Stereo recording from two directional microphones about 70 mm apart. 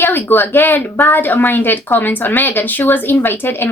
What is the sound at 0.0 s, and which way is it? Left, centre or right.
A woman's voice, left.